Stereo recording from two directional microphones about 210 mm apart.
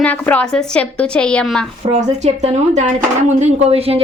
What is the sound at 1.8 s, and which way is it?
Speech, 30° right (ahead or behind).